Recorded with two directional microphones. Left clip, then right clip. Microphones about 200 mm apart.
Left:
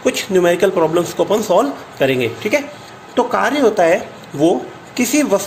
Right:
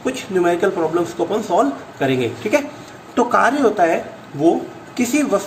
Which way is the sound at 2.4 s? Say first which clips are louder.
Even; 15° left (ahead or behind).